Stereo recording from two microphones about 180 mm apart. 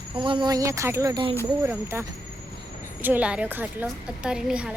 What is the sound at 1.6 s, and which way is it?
A woman's voice, 15° right (ahead or behind).